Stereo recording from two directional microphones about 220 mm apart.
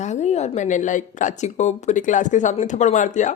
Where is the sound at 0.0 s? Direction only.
30° left (ahead or behind).